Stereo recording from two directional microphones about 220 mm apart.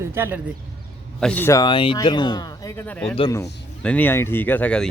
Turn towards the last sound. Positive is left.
turn(degrees=5)  # may be behind; listen again after turning